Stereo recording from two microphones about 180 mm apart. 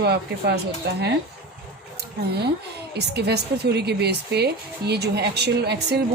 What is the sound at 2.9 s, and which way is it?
A woman's voice, 65° right (ahead or behind).